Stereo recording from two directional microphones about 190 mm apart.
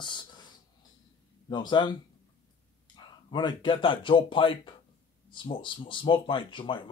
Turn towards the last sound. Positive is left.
turn(degrees=25)  # may be behind; listen again after turning